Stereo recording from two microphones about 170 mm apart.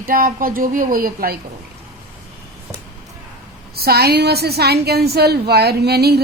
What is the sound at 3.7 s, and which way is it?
A woman's voice, 65° right (ahead or behind).